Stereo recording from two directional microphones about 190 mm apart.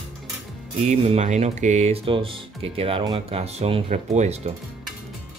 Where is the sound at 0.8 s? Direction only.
35° right (ahead or behind).